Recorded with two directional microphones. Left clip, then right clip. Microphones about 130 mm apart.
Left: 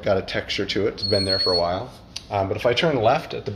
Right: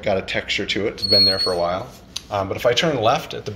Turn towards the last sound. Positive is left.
turn(degrees=60)  # may be behind; listen again after turning